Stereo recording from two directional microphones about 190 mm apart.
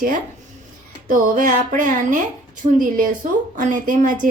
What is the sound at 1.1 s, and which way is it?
Speech, 45° right (ahead or behind).